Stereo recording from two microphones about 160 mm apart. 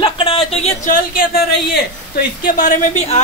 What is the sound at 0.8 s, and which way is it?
Speech, 60° left (ahead or behind).